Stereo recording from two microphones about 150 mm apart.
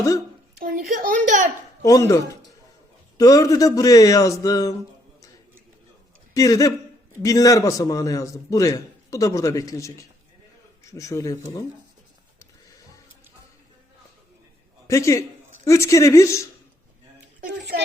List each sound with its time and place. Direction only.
0.6 s a child's voice: 65° right (ahead or behind)
1.8 s a man's voice: 20° left (ahead or behind)
6.3 s a man's voice: 25° left (ahead or behind)
10.9 s a man's voice: 20° left (ahead or behind)
14.8 s a man's voice: 20° left (ahead or behind)